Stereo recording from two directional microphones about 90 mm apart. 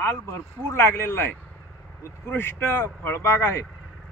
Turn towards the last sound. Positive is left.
turn(degrees=25)  # may be behind; listen again after turning